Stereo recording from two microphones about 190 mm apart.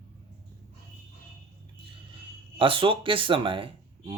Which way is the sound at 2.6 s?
25° right (ahead or behind).